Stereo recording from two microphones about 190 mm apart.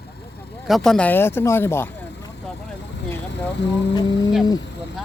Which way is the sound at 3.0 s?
65° left (ahead or behind).